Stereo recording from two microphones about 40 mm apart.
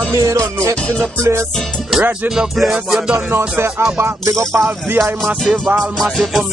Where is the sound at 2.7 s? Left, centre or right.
Right.